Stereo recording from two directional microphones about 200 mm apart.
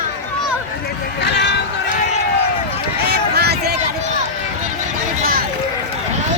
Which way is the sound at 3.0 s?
55° right (ahead or behind).